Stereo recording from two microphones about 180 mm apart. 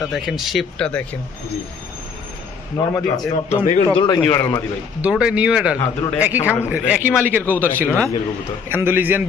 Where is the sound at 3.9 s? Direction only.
25° left (ahead or behind).